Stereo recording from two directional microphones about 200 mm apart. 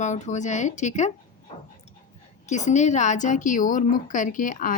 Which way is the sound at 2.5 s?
35° left (ahead or behind).